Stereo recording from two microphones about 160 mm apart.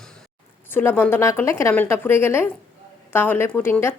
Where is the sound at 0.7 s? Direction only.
10° left (ahead or behind).